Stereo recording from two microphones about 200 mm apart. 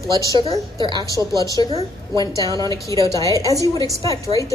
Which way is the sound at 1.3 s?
15° left (ahead or behind).